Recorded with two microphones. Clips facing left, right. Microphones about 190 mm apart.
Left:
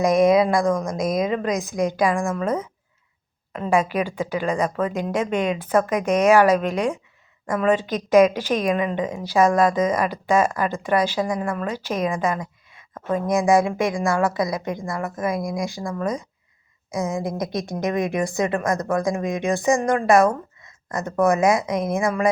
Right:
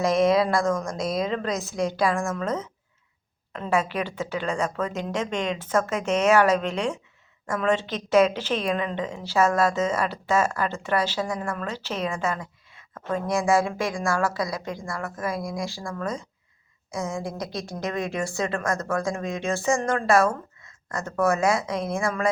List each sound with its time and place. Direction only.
0.0 s a woman's voice: 15° left (ahead or behind)